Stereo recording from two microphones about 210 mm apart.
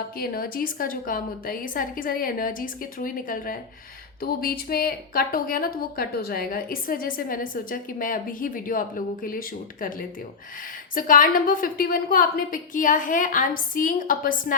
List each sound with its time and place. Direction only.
0.2 s a woman's voice: 45° left (ahead or behind)
10.9 s a woman's voice: 40° left (ahead or behind)